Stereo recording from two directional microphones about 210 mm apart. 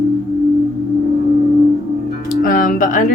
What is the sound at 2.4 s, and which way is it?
Speech, 40° left (ahead or behind).